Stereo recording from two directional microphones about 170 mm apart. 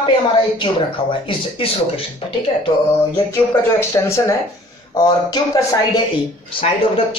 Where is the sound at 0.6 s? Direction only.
30° left (ahead or behind).